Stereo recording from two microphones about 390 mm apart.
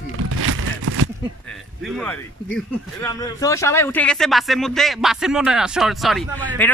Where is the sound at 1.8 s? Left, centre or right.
Centre.